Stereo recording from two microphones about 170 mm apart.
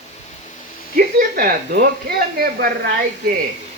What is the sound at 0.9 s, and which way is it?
Speech, 60° right (ahead or behind).